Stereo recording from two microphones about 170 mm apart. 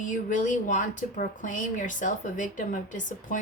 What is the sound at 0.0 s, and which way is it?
A woman's voice, 45° left (ahead or behind).